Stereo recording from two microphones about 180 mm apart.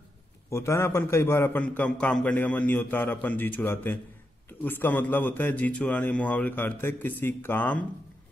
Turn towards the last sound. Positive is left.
turn(degrees=10)  # may be behind; listen again after turning